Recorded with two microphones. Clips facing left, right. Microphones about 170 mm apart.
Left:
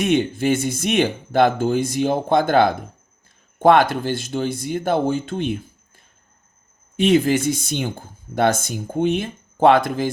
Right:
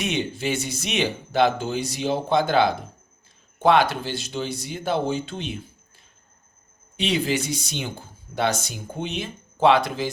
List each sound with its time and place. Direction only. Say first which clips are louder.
0.0 s speech: left 7 dB; 50° left (ahead or behind)
6.9 s speech: left 8 dB; 50° left (ahead or behind)